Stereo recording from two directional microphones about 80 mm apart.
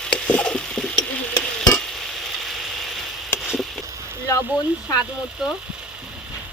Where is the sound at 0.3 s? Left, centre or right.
Centre.